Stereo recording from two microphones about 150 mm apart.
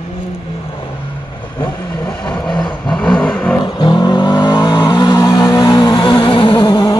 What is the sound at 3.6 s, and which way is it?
Vehicle, 30° left (ahead or behind).